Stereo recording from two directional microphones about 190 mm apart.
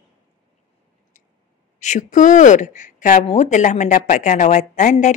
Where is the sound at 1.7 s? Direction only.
40° left (ahead or behind).